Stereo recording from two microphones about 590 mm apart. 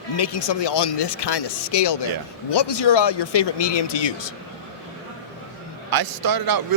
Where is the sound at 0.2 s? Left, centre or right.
Left.